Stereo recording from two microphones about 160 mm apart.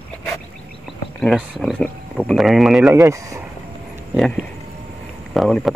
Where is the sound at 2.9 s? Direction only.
20° right (ahead or behind).